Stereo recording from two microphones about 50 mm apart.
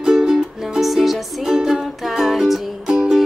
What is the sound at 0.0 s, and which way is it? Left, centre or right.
Music, centre.